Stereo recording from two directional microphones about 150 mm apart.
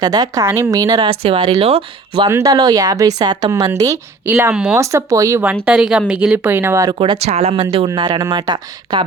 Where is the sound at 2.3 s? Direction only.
20° right (ahead or behind).